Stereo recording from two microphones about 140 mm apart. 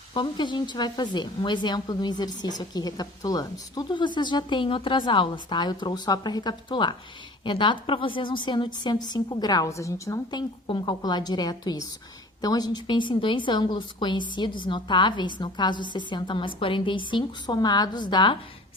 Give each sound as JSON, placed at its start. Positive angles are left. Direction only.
{"t": 0.1, "sound": "speech", "side_deg": 35}
{"t": 10.7, "sound": "a woman's voice", "side_deg": 35}